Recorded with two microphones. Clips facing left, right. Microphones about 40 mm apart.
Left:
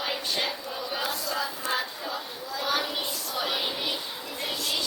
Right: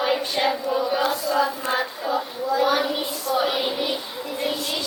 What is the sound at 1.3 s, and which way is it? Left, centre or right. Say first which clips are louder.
Child singing: right 8 dB; right.